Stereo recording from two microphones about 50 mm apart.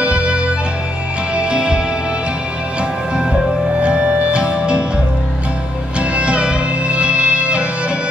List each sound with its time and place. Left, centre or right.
0.0 s music: right
3.7 s music: right
5.9 s music: right